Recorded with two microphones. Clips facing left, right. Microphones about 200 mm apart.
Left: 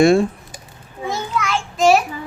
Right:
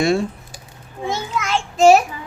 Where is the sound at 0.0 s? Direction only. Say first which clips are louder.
Left 5 dB; 50° left (ahead or behind).